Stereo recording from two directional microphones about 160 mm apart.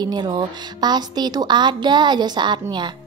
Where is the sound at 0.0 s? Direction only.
25° right (ahead or behind).